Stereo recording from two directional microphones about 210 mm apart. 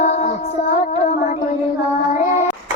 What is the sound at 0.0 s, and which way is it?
Child singing, 35° left (ahead or behind).